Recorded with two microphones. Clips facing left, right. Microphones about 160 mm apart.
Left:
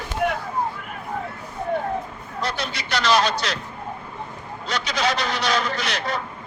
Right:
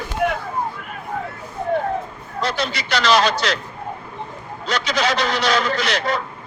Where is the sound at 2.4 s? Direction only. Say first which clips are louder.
Right 5 dB; 90° right.